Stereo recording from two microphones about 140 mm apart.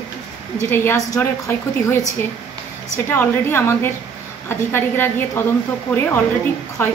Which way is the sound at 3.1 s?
15° left (ahead or behind).